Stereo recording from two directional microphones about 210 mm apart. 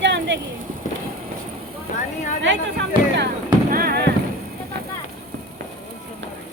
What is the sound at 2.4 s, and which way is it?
Speech, 60° right (ahead or behind).